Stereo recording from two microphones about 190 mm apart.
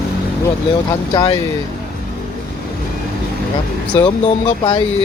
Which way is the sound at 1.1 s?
25° left (ahead or behind).